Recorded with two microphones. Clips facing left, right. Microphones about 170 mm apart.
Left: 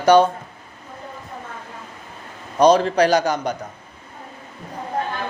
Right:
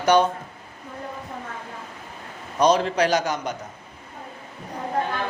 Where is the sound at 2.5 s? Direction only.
35° left (ahead or behind).